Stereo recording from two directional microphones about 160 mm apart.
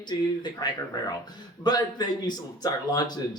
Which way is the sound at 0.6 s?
25° left (ahead or behind).